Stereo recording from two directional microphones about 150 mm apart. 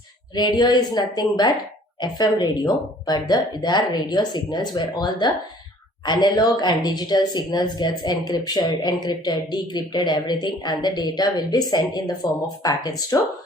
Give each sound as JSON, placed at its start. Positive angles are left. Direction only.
{"t": 0.3, "sound": "speech", "side_deg": 30}